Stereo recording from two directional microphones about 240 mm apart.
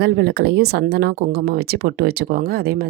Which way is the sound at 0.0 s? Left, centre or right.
Right.